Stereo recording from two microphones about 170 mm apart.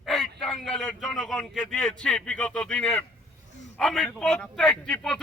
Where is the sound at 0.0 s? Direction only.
Centre (ahead or behind).